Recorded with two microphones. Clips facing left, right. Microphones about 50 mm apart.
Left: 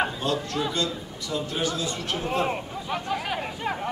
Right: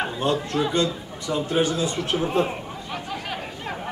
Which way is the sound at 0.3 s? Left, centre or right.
Centre.